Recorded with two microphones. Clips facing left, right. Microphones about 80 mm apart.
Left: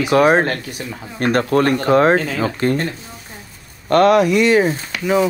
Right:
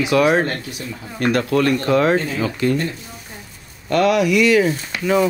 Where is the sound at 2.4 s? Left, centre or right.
Left.